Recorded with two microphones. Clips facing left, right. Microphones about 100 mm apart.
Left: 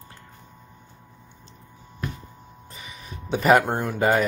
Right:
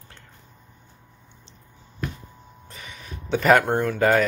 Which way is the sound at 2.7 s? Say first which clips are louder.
Right 1 dB; centre (ahead or behind).